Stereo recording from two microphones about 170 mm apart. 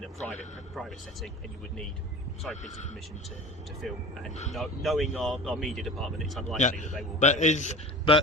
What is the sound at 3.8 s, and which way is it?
Speech, centre (ahead or behind).